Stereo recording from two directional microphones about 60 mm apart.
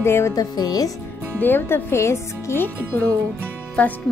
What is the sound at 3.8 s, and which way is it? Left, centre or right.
Music, centre.